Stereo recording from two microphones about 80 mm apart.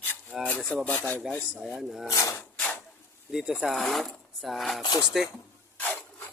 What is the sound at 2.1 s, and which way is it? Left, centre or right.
Speech, left.